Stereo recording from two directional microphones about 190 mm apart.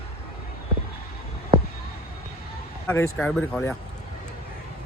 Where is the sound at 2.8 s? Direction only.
10° left (ahead or behind).